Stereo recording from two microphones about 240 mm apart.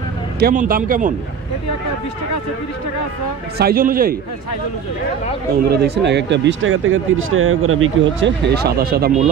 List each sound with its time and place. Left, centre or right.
0.4 s speech: right
3.5 s speech: right
5.7 s speech: right